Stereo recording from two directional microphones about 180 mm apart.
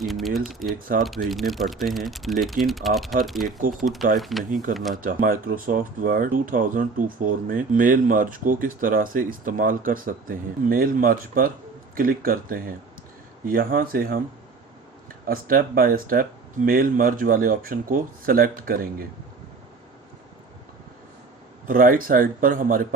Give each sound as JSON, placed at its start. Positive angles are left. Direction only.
{"t": 0.0, "sound": "speech", "side_deg": 0}
{"t": 3.4, "sound": "speech", "side_deg": -50}
{"t": 4.2, "sound": "speech", "side_deg": 0}
{"t": 4.4, "sound": "speech", "side_deg": -50}
{"t": 4.7, "sound": "speech", "side_deg": 0}
{"t": 5.0, "sound": "speech", "side_deg": -50}
{"t": 15.3, "sound": "speech", "side_deg": -55}
{"t": 21.7, "sound": "speech", "side_deg": -50}